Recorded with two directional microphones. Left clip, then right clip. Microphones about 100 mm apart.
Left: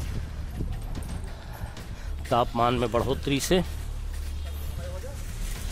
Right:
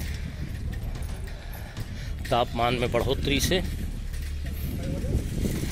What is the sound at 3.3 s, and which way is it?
Speech, 55° left (ahead or behind).